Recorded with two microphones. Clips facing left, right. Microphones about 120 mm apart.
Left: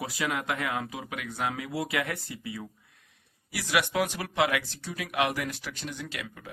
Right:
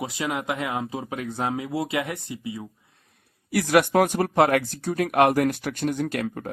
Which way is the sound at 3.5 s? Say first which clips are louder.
Right 9 dB; 50° right (ahead or behind).